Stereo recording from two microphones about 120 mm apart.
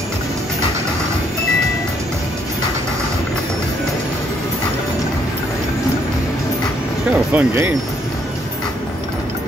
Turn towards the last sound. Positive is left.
turn(degrees=-15)  # may be behind; listen again after turning